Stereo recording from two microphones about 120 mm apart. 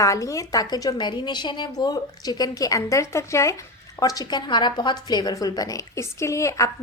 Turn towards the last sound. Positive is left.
turn(degrees=25)  # may be behind; listen again after turning